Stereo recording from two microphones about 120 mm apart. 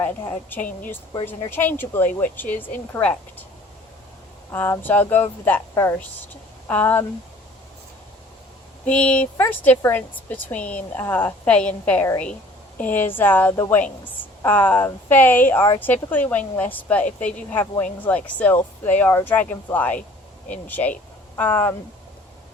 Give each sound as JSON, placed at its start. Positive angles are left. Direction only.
{"t": 0.0, "sound": "a woman's voice", "side_deg": 15}
{"t": 4.5, "sound": "a woman's voice", "side_deg": 20}
{"t": 8.8, "sound": "a woman's voice", "side_deg": 10}